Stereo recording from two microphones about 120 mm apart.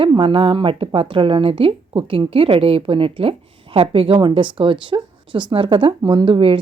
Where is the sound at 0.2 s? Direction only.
45° right (ahead or behind).